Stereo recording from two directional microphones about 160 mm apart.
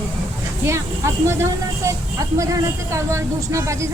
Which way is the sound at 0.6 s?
15° right (ahead or behind).